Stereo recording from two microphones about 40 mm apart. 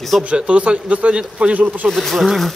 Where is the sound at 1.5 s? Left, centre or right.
Right.